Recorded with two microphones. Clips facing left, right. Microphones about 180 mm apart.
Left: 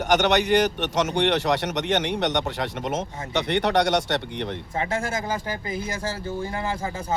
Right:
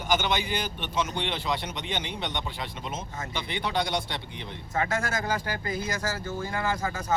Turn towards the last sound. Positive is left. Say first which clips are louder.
# left 1 dB
turn(degrees=30)  # may be behind; listen again after turning